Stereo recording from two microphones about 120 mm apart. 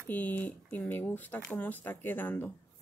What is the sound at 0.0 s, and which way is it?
Speech, 15° left (ahead or behind).